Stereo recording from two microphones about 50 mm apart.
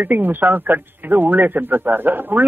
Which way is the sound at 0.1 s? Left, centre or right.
Right.